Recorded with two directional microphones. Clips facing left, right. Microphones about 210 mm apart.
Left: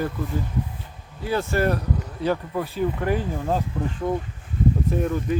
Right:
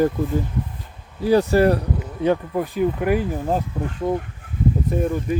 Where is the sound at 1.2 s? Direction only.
35° right (ahead or behind).